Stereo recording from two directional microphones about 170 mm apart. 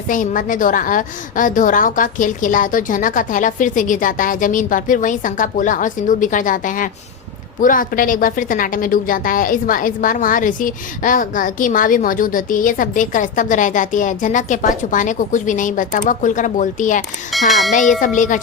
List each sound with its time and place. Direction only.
0.1 s a woman's voice: 50° left (ahead or behind)
17.5 s speech: centre (ahead or behind)
18.0 s a woman's voice: 50° left (ahead or behind)